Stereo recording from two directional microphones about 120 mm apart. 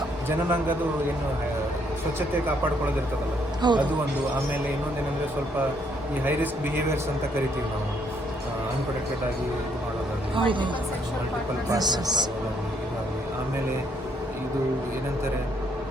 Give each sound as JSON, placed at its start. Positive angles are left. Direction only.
{"t": 3.6, "sound": "a man's voice", "side_deg": -40}
{"t": 10.3, "sound": "speech", "side_deg": -45}
{"t": 11.7, "sound": "a man's voice", "side_deg": -35}